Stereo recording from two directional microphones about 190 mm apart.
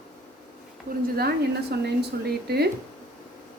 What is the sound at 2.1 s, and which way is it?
Speech, 55° right (ahead or behind).